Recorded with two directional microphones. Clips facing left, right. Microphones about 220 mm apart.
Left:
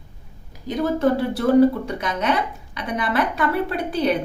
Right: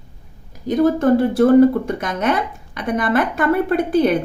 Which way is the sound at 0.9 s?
50° right (ahead or behind).